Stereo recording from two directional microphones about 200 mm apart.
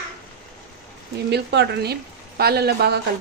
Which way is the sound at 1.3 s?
55° right (ahead or behind).